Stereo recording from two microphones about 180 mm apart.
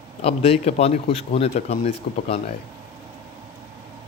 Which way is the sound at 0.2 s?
35° left (ahead or behind).